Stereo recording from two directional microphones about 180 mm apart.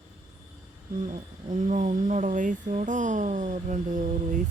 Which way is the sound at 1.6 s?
40° right (ahead or behind).